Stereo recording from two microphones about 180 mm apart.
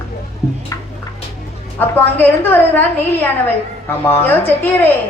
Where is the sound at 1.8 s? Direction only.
10° left (ahead or behind).